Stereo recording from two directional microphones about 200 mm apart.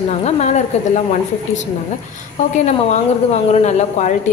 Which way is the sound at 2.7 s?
35° left (ahead or behind).